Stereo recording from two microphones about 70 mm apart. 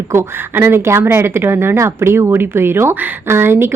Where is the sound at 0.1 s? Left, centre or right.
Right.